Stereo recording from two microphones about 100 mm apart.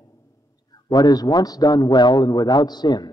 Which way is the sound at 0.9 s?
45° left (ahead or behind).